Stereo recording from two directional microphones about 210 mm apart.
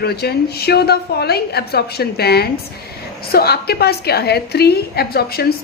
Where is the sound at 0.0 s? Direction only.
50° left (ahead or behind).